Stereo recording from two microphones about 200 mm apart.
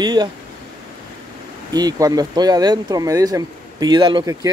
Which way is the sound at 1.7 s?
20° right (ahead or behind).